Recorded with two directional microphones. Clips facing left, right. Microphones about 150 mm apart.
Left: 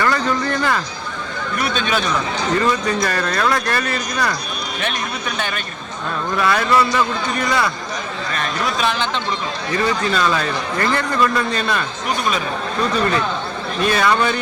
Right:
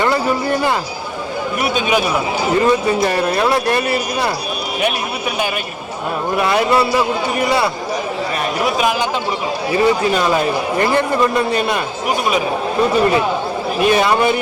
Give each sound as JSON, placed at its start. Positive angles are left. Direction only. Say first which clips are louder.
{"t": 0.3, "sound": "a sound", "louder": "right 3 dB", "side_deg": -10}
{"t": 1.6, "sound": "speech", "louder": "right 4 dB", "side_deg": -10}
{"t": 3.3, "sound": "speech", "louder": "right 4 dB", "side_deg": -25}
{"t": 3.8, "sound": "speech", "louder": "right 5 dB", "side_deg": -10}
{"t": 6.3, "sound": "speech", "louder": "right 2 dB", "side_deg": -20}
{"t": 6.9, "sound": "speech", "louder": "right 3 dB", "side_deg": -10}